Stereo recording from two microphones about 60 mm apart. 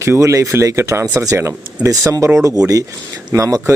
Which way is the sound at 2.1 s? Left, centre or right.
Right.